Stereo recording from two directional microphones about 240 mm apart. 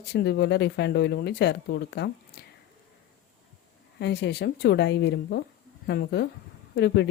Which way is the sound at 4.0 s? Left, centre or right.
Left.